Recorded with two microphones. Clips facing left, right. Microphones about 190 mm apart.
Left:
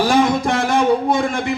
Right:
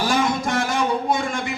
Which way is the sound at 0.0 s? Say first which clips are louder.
Left 6 dB; 55° left (ahead or behind).